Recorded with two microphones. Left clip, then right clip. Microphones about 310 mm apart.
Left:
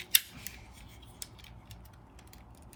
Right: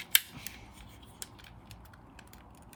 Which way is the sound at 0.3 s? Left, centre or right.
Centre.